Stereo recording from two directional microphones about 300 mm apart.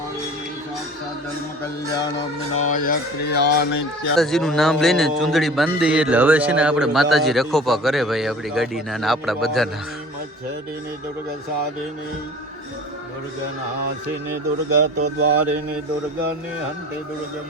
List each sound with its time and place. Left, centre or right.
2.6 s speech: left
4.1 s a man's voice: centre
14.8 s speech: right